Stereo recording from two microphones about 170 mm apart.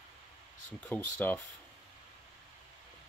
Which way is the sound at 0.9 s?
10° left (ahead or behind).